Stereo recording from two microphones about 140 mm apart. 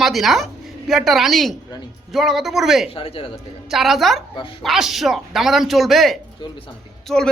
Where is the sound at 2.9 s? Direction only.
40° left (ahead or behind).